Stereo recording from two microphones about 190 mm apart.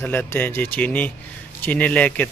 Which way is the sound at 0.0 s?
10° left (ahead or behind).